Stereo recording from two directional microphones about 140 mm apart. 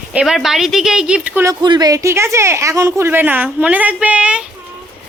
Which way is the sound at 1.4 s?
30° right (ahead or behind).